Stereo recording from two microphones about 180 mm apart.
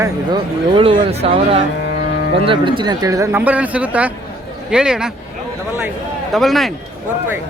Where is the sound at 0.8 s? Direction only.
30° right (ahead or behind); by 5.1 s 5° right (ahead or behind).